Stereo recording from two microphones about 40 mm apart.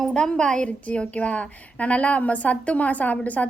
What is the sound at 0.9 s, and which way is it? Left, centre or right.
A woman's voice, left.